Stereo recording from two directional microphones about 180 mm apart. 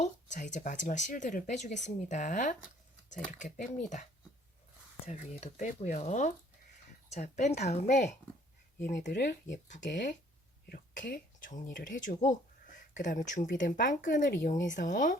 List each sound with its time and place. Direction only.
0.0 s speech: 40° left (ahead or behind)
5.0 s speech: 35° left (ahead or behind)